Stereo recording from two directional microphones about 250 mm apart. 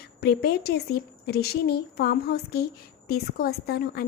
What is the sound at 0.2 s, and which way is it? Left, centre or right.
A woman's voice, left.